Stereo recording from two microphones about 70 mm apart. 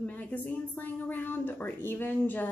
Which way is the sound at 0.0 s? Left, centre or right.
Left.